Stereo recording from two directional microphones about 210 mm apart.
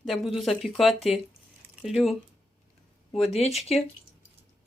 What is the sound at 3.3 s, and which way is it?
Speech, 30° left (ahead or behind).